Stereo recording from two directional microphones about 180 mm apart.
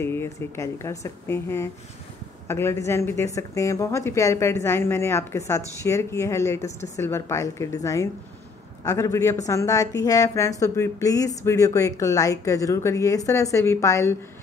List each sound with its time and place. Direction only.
0.0 s a woman's voice: 15° left (ahead or behind)